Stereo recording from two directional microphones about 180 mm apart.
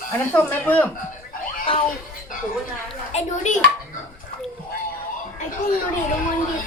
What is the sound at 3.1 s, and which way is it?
Music, 40° left (ahead or behind).